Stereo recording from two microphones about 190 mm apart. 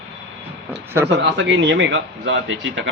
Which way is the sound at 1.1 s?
65° right (ahead or behind).